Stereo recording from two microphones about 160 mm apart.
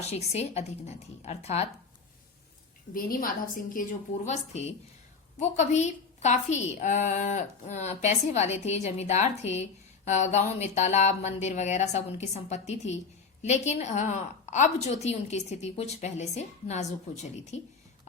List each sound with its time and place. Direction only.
0.0 s a woman's voice: 40° left (ahead or behind)
2.9 s a woman's voice: 60° left (ahead or behind)
4.3 s a woman's voice: 45° left (ahead or behind)